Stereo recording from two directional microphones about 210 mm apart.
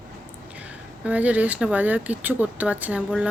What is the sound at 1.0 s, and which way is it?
Speech, 5° right (ahead or behind).